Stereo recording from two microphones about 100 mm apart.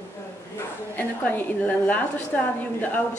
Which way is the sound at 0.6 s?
20° left (ahead or behind).